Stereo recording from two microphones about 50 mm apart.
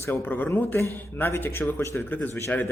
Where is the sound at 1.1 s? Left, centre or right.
Left.